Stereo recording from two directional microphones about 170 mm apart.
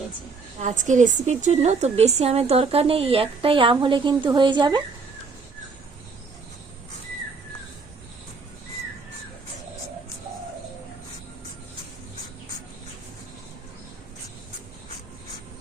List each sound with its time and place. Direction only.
0.6 s a woman's voice: 45° right (ahead or behind); by 4.8 s 25° right (ahead or behind)